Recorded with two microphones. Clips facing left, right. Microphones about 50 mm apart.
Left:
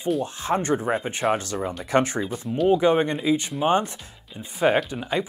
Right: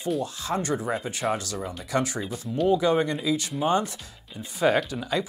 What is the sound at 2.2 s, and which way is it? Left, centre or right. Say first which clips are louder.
Speech: left 3 dB; centre.